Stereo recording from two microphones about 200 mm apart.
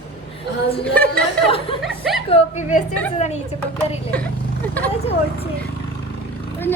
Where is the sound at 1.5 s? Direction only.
25° left (ahead or behind).